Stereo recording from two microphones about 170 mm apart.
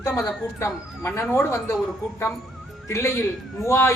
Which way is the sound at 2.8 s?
15° left (ahead or behind).